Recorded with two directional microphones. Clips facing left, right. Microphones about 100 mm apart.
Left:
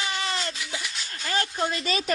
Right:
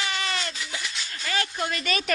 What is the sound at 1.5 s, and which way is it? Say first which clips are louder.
Speech: left 1 dB; 25° left (ahead or behind).